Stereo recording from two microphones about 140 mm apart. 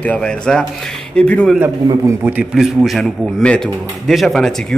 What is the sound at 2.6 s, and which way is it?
Speech, centre (ahead or behind).